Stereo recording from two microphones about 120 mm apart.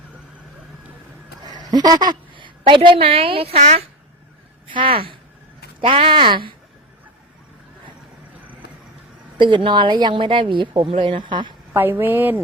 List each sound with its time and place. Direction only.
1.5 s a woman's voice: 35° right (ahead or behind); by 3.8 s 65° right (ahead or behind)
4.7 s speech: 45° right (ahead or behind)
9.4 s speech: 45° right (ahead or behind)
11.7 s speech: 20° right (ahead or behind)